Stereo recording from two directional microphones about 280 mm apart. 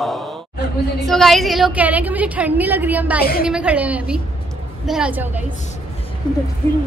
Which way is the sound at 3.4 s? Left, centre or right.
Centre.